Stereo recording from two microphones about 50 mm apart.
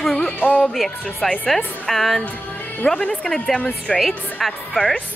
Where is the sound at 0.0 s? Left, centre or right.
Centre.